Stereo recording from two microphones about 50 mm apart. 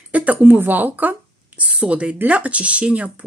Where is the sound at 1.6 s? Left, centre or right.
Right.